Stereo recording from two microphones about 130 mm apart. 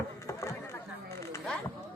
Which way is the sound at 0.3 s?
25° left (ahead or behind).